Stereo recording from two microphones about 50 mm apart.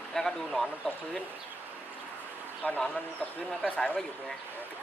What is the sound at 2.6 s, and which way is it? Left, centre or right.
Speech, left.